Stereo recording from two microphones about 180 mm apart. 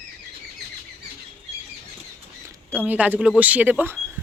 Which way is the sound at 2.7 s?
10° right (ahead or behind).